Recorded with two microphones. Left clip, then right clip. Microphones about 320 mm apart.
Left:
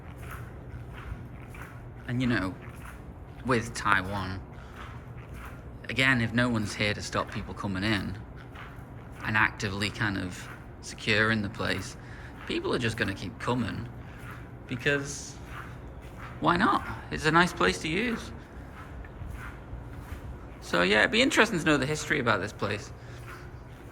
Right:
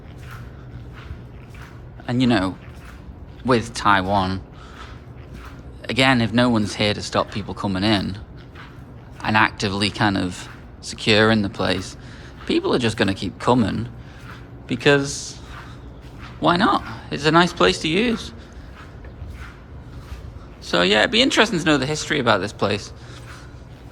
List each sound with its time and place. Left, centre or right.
2.0 s speech: centre
5.8 s speech: centre
9.2 s speech: centre
16.4 s speech: centre
20.7 s speech: centre